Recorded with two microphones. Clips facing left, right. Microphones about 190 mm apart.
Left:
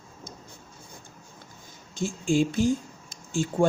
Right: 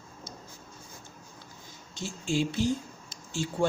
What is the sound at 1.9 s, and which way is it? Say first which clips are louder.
Speech: left 6 dB; 50° left (ahead or behind).